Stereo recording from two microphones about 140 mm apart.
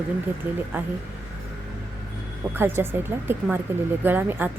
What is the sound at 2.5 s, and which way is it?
Speech, 15° right (ahead or behind).